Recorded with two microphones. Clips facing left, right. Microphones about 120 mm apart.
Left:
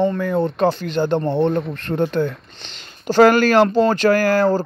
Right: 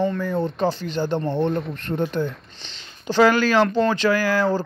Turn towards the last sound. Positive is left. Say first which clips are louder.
# left 4 dB
turn(degrees=50)  # may be behind; listen again after turning